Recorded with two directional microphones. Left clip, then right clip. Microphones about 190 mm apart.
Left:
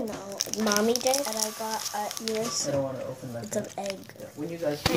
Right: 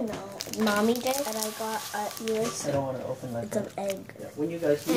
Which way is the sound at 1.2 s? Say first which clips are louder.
Even; 5° left (ahead or behind).